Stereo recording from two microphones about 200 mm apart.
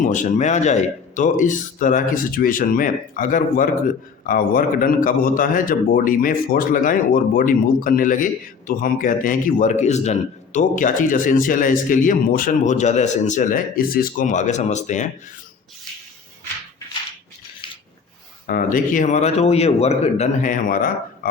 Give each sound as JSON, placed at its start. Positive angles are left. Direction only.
{"t": 0.0, "sound": "a man's voice", "side_deg": 40}
{"t": 18.4, "sound": "speech", "side_deg": 45}